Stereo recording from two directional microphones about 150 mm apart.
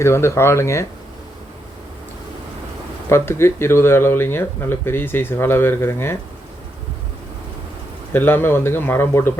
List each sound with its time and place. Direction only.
0.0 s speech: 20° left (ahead or behind)
3.1 s speech: 15° left (ahead or behind)
8.1 s speech: 15° left (ahead or behind)